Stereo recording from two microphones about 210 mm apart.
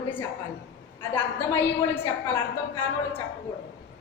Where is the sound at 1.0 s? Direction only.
10° left (ahead or behind).